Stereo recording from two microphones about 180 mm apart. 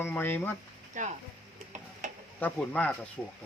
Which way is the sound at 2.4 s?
5° left (ahead or behind).